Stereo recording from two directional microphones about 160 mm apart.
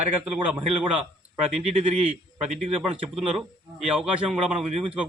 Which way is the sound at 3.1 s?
Centre (ahead or behind).